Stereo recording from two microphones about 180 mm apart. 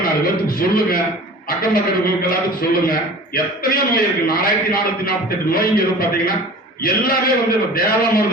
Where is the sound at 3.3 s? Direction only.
55° left (ahead or behind).